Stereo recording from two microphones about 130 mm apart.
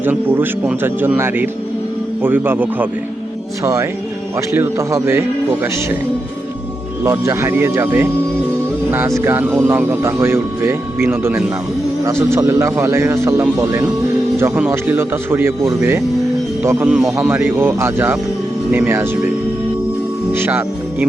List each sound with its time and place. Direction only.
0.0 s speech: 15° right (ahead or behind)
7.0 s speech: 20° right (ahead or behind)
16.8 s a man's voice: 5° right (ahead or behind)
17.1 s speech: 15° right (ahead or behind)
20.3 s speech: 15° right (ahead or behind)